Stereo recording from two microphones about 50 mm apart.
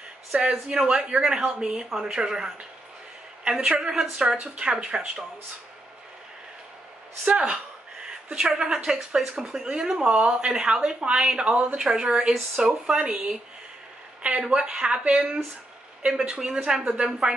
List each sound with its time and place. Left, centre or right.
0.3 s a woman's voice: centre
7.2 s a woman's voice: right
16.1 s a woman's voice: centre